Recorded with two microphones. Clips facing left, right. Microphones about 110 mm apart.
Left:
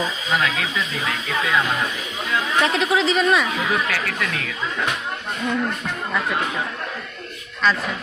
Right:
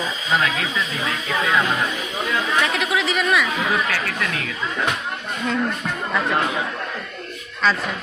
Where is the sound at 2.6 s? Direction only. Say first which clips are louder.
Left 5 dB; 30° left (ahead or behind).